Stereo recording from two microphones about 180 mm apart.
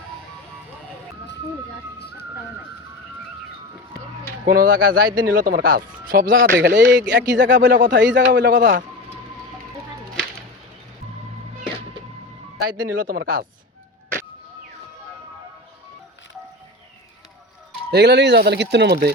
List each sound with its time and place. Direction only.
2.0 s whistling: 65° left (ahead or behind)
4.4 s speech: 50° right (ahead or behind)
6.6 s speech: 80° right
7.7 s speech: 45° right (ahead or behind)
7.9 s speech: 85° right
8.5 s speech: 45° right (ahead or behind)
12.8 s speech: 50° right (ahead or behind)
17.9 s speech: 70° right (ahead or behind)